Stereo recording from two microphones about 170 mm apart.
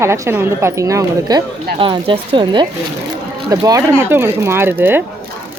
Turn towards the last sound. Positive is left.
turn(degrees=-10)  # may be behind; listen again after turning